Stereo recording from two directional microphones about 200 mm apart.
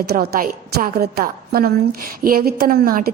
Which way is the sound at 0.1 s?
45° right (ahead or behind).